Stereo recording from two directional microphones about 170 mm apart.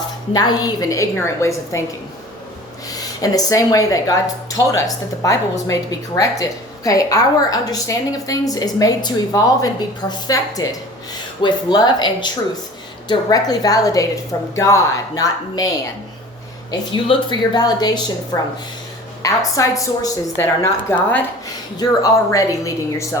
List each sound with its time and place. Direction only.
0.3 s a woman's voice: 20° left (ahead or behind)
2.9 s a woman's voice: 20° left (ahead or behind)
16.7 s a woman's voice: 30° left (ahead or behind)